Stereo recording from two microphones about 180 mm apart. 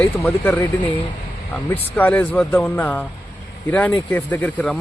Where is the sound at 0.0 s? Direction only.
10° left (ahead or behind).